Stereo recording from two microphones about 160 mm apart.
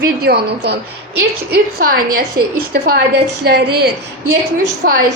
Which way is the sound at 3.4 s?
80° right.